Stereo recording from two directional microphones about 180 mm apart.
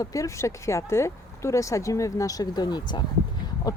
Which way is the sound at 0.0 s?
20° left (ahead or behind).